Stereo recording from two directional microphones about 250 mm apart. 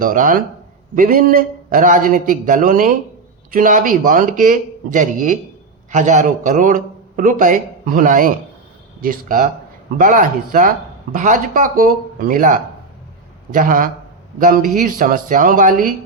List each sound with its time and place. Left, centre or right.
0.0 s speech: right